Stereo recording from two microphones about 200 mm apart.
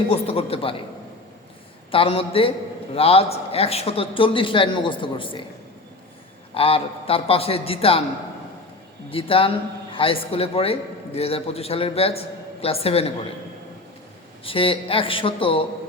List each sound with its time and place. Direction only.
0.1 s a man's voice: 30° left (ahead or behind)
1.9 s a man's voice: 25° left (ahead or behind)
6.5 s a man's voice: 30° left (ahead or behind)
9.0 s a man's voice: 25° left (ahead or behind)
14.4 s a man's voice: 25° left (ahead or behind)